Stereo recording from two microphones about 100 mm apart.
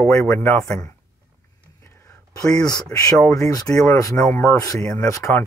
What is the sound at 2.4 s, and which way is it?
Speech, 40° left (ahead or behind).